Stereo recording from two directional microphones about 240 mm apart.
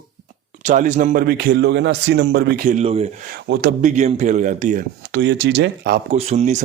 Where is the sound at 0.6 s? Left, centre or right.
Right.